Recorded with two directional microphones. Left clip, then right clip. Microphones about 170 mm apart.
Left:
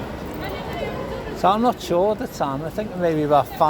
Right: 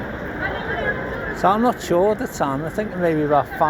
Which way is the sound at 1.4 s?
15° left (ahead or behind).